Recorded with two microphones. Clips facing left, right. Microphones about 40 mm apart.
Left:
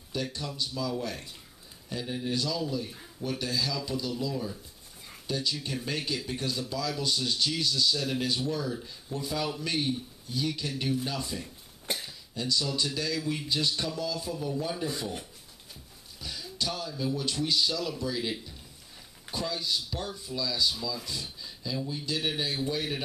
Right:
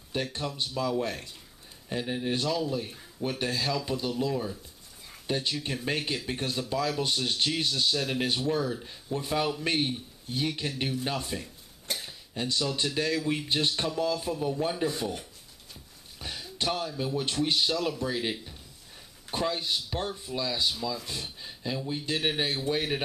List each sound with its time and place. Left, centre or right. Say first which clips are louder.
0.1 s speech: right 2 dB; right
16.2 s speech: right 1 dB; right
19.3 s speech: right 3 dB; right